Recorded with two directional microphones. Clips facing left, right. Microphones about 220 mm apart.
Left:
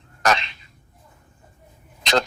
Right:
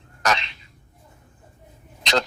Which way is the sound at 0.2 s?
50° left (ahead or behind).